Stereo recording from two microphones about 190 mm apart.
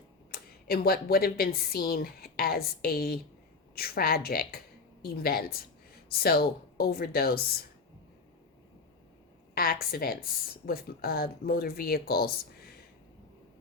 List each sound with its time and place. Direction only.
0.3 s a woman's voice: 55° left (ahead or behind)
9.9 s a woman's voice: 50° left (ahead or behind)